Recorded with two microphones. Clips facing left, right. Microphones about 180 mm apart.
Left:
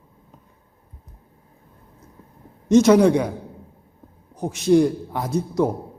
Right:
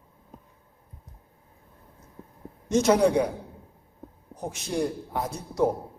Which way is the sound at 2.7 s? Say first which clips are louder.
Left 7 dB; 90° left.